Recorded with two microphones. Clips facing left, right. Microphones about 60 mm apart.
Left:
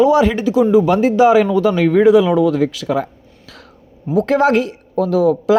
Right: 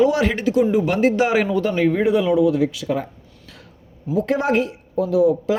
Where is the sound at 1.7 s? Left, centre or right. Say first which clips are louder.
Left 8 dB; left.